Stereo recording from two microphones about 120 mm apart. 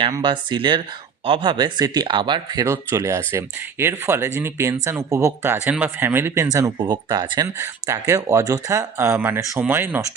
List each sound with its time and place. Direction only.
0.2 s speech: 40° right (ahead or behind); by 6.5 s 20° right (ahead or behind)
6.5 s speech: 30° right (ahead or behind)
7.6 s speech: 20° right (ahead or behind)